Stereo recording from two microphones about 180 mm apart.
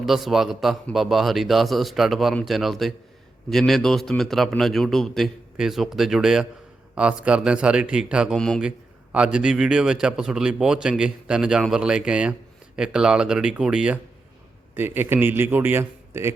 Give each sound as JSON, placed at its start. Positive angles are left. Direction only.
{"t": 0.0, "sound": "a man's voice", "side_deg": 0}